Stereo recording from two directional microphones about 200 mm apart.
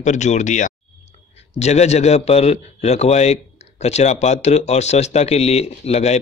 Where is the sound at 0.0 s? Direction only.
35° left (ahead or behind).